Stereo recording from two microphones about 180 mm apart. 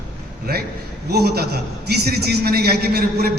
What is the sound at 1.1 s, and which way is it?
A man's voice, 65° right (ahead or behind).